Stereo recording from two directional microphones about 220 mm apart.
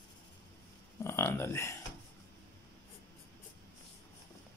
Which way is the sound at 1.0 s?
10° left (ahead or behind).